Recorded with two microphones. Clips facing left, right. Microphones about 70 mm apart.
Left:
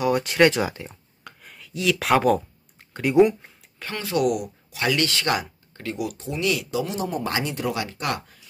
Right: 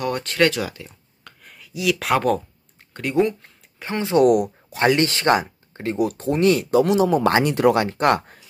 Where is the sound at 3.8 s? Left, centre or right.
Right.